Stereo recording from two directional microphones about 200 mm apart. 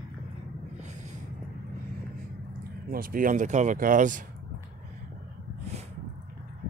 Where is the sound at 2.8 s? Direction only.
45° right (ahead or behind).